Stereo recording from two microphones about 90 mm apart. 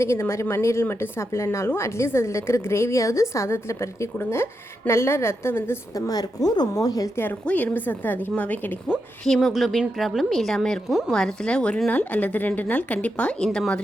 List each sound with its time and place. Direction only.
0.0 s a woman's voice: 30° left (ahead or behind)
5.9 s a woman's voice: 45° left (ahead or behind)
7.4 s a woman's voice: 15° left (ahead or behind)
9.2 s a woman's voice: 5° left (ahead or behind)